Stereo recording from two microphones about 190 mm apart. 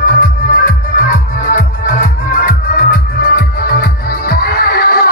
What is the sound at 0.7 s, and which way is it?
Music, 45° left (ahead or behind).